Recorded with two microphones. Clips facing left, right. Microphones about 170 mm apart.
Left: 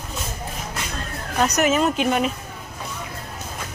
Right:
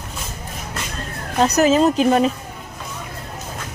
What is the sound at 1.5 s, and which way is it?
Speech, 35° right (ahead or behind).